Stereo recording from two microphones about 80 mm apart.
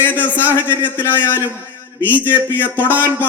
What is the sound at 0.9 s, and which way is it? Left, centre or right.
A man's voice, left.